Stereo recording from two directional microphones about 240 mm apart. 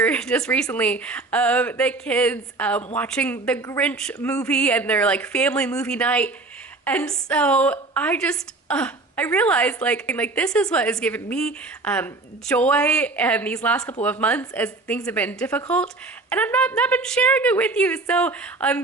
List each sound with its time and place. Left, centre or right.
0.0 s a woman's voice: centre